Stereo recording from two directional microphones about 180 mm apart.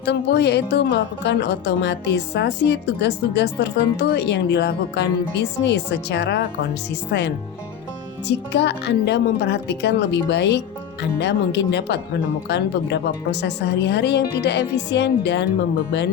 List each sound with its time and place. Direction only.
0.0 s a woman's voice: 65° left (ahead or behind)